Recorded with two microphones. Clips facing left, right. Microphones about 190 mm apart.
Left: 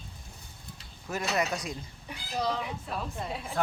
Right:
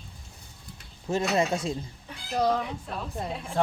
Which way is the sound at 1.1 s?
25° right (ahead or behind).